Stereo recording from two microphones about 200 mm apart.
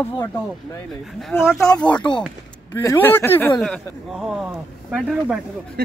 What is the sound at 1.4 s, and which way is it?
Speech, centre (ahead or behind).